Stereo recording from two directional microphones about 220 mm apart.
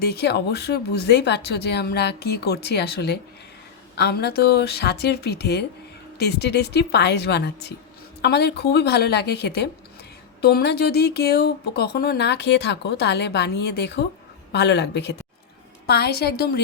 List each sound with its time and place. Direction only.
0.0 s speech: 50° left (ahead or behind)